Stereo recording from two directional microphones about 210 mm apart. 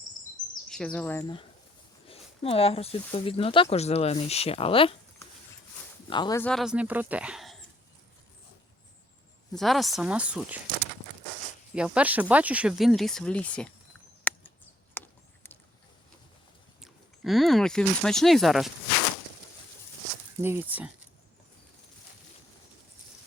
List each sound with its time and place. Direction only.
0.7 s speech: 5° left (ahead or behind); by 4.9 s 25° left (ahead or behind)
6.1 s speech: 20° left (ahead or behind)
6.4 s speech: centre (ahead or behind)
9.6 s speech: centre (ahead or behind)
11.7 s speech: 5° right (ahead or behind)
14.3 s a sound: 10° left (ahead or behind)
15.4 s boat: 10° left (ahead or behind)
16.8 s speech: centre (ahead or behind)
20.4 s speech: 10° right (ahead or behind)